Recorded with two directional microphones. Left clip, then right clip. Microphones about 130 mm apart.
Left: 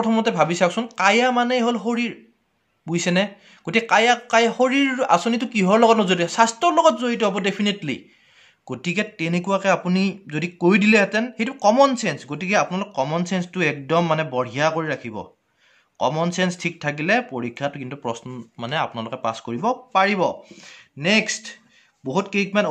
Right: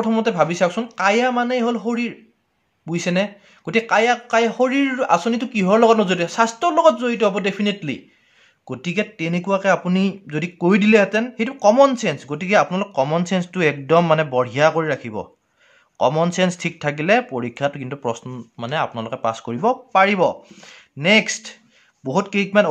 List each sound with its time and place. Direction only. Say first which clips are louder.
0.0 s speech: right 1 dB; 10° right (ahead or behind); by 22.7 s 45° right (ahead or behind)